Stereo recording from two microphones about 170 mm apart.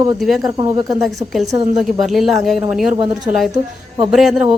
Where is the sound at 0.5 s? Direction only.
20° right (ahead or behind).